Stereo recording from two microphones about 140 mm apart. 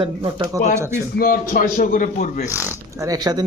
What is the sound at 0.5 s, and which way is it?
Speech, 25° right (ahead or behind).